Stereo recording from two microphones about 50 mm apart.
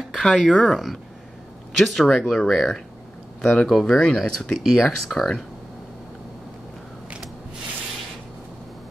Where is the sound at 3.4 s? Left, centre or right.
Centre.